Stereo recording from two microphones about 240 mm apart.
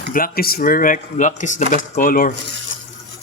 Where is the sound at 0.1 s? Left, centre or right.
Left.